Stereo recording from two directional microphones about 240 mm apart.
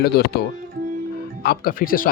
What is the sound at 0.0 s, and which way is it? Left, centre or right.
Speech, left.